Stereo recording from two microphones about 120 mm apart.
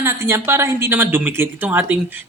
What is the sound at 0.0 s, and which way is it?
A man's voice, 20° right (ahead or behind).